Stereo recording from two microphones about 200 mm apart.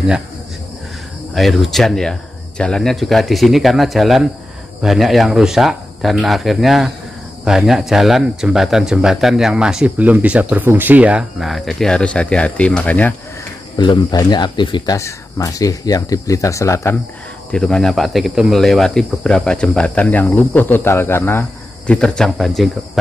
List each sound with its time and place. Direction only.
1.3 s speech: centre (ahead or behind)
13.7 s speech: 20° left (ahead or behind)
17.5 s speech: 5° left (ahead or behind)